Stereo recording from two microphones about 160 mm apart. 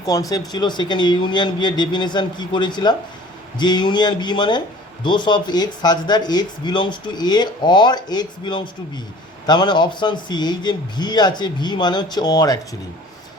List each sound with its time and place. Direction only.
0.0 s speech: 25° left (ahead or behind)